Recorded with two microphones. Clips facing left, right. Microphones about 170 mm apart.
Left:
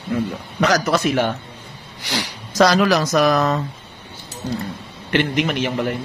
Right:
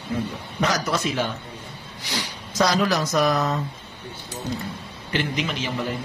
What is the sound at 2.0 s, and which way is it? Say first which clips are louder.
Speech: left 5 dB; 75° left (ahead or behind).